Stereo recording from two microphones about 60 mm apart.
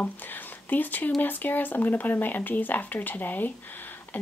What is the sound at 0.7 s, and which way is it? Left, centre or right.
Speech, left.